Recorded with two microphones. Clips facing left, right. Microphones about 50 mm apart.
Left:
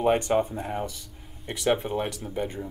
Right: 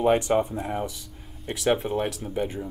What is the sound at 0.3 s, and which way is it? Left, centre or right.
Speech, centre.